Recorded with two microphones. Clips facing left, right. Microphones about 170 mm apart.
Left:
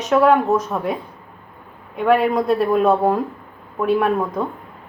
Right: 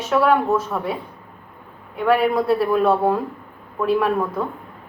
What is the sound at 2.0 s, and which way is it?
Speech, 15° left (ahead or behind).